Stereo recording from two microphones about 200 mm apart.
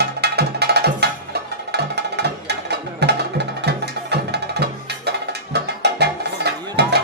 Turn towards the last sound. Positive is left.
turn(degrees=-55)  # may be behind; listen again after turning